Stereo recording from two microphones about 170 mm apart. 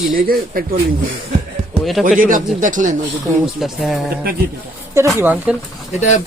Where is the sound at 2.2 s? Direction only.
50° right (ahead or behind).